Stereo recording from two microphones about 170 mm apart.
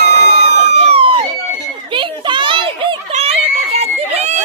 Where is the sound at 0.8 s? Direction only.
35° right (ahead or behind).